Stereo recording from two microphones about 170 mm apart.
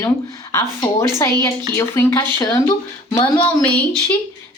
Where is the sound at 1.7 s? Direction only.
15° left (ahead or behind).